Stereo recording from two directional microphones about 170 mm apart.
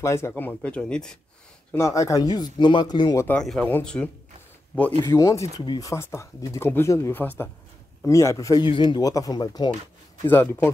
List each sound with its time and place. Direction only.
0.0 s speech: 15° left (ahead or behind)
1.7 s a man's voice: 15° left (ahead or behind)
3.3 s speech: 5° left (ahead or behind)
5.0 s a man's voice: 15° left (ahead or behind)
10.2 s speech: 10° left (ahead or behind)